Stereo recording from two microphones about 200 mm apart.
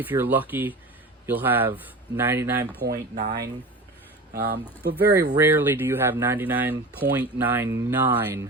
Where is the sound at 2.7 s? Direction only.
50° right (ahead or behind).